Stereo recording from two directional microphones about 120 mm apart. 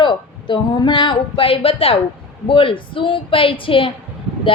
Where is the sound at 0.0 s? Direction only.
40° left (ahead or behind).